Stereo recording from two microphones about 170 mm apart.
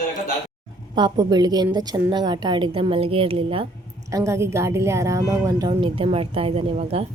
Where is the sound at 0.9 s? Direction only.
25° right (ahead or behind).